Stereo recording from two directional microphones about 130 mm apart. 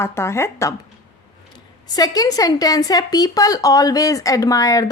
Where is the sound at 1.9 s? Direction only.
30° left (ahead or behind).